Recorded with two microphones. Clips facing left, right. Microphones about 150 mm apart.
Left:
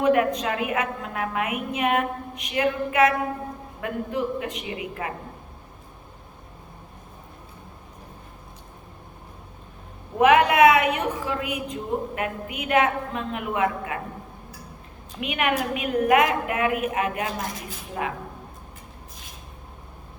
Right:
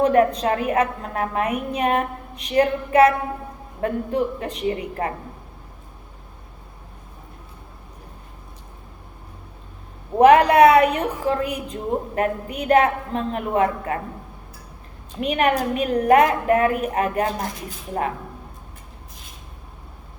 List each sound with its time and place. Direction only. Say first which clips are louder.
0.0 s a woman's voice: right 3 dB; 35° right (ahead or behind)
10.2 s a woman's voice: right 4 dB; 35° right (ahead or behind)
15.2 s a woman's voice: right 5 dB; 40° right (ahead or behind)